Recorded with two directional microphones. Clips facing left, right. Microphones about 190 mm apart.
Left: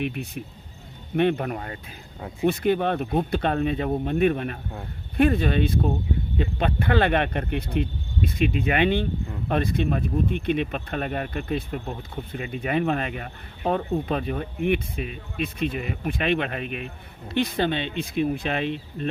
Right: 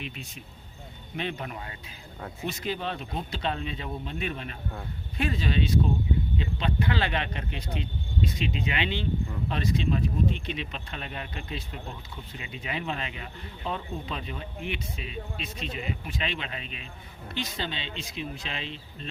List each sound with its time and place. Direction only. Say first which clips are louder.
0.0 s speech: left 11 dB; 60° left (ahead or behind)